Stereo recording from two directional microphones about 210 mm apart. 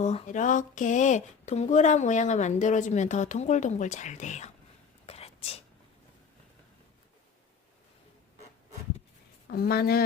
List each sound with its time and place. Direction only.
0.0 s speech: 30° left (ahead or behind)
5.0 s whispering: 30° left (ahead or behind)
9.5 s speech: 45° left (ahead or behind)